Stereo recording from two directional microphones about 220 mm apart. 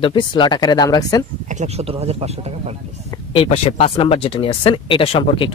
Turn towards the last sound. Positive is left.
turn(degrees=25)  # may be behind; listen again after turning